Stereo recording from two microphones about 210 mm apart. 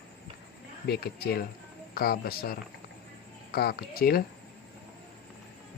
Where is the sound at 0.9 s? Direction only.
45° left (ahead or behind).